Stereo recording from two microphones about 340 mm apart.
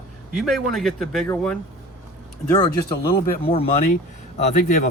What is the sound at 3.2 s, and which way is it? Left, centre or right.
Speech, centre.